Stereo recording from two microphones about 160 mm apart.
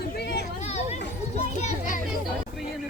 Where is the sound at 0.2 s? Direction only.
90° left.